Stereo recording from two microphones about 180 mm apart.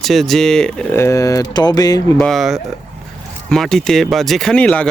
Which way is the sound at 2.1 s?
5° left (ahead or behind).